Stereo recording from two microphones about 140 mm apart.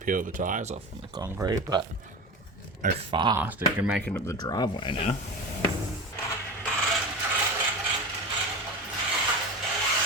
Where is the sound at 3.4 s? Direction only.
10° right (ahead or behind).